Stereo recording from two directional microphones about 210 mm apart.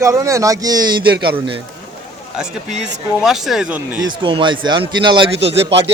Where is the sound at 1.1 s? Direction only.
50° right (ahead or behind).